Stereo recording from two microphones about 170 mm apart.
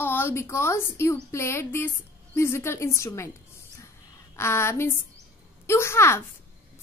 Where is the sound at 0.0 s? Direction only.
15° left (ahead or behind).